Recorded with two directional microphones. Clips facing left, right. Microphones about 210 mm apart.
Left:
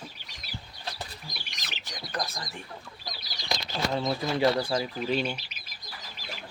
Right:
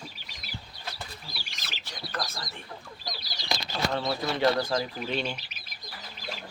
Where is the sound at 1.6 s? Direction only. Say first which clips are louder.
Even; 15° left (ahead or behind).